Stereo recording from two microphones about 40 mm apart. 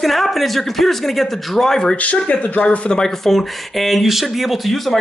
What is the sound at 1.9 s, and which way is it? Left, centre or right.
Speech, left.